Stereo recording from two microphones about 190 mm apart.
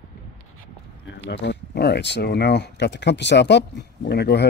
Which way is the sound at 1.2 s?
65° left (ahead or behind).